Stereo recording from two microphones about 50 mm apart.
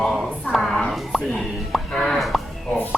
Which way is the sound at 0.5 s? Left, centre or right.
Centre.